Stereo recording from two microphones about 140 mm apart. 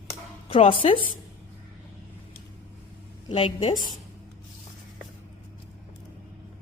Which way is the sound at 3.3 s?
40° left (ahead or behind).